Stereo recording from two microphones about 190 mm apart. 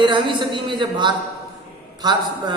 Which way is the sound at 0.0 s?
25° right (ahead or behind).